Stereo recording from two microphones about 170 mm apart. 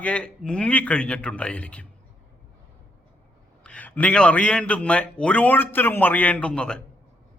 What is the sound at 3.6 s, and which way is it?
A man's voice, 10° left (ahead or behind).